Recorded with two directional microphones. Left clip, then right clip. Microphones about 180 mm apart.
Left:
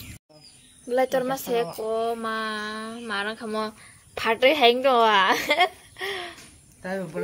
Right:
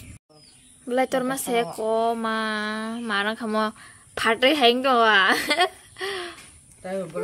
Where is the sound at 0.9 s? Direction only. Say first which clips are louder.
Even; 45° right (ahead or behind).